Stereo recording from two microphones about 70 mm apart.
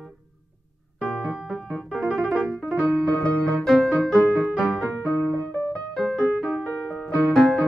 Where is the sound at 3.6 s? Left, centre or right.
Centre.